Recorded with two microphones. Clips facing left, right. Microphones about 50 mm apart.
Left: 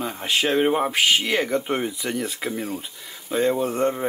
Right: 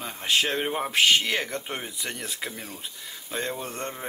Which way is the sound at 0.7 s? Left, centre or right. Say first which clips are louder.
Left 8 dB; centre.